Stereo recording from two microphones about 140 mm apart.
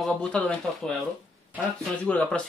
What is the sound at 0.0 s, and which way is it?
Speech, 10° left (ahead or behind).